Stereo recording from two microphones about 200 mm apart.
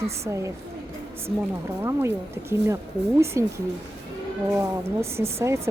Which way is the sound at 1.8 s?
15° right (ahead or behind).